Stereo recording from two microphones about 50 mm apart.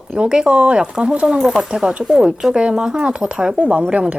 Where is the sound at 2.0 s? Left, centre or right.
Centre.